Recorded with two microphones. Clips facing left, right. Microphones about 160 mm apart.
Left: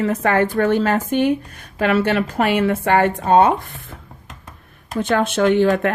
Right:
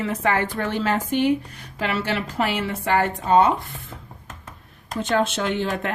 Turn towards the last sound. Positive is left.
turn(degrees=55)  # may be behind; listen again after turning